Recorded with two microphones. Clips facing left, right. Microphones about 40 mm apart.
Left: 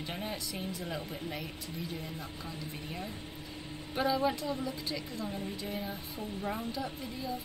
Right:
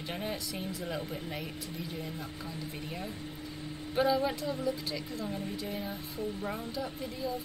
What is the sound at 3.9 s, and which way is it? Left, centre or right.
Speech, centre.